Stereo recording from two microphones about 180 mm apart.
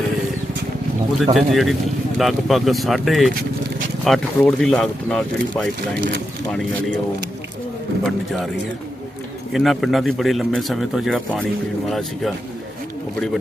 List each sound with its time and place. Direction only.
1.2 s speech: centre (ahead or behind)
8.0 s speech: centre (ahead or behind)
9.5 s speech: centre (ahead or behind)